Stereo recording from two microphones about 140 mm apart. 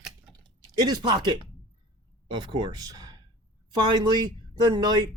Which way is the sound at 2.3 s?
35° right (ahead or behind).